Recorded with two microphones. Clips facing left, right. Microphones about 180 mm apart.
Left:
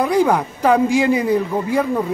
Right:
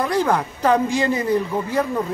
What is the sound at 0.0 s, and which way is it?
Speech, 10° left (ahead or behind).